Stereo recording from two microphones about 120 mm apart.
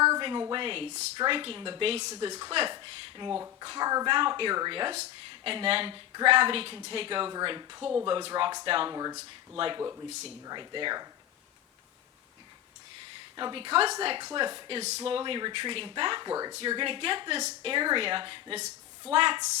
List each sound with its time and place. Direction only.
0.2 s a sound: 40° right (ahead or behind)
0.5 s speech: 45° right (ahead or behind)
2.8 s speech: 40° right (ahead or behind)
4.1 s speech: 45° right (ahead or behind)
8.9 s speech: 30° right (ahead or behind)
9.6 s speech: 45° right (ahead or behind)
13.3 s speech: 40° right (ahead or behind)
14.8 s speech: 60° right (ahead or behind); by 16.6 s 30° right (ahead or behind)
16.6 s speech: 45° right (ahead or behind)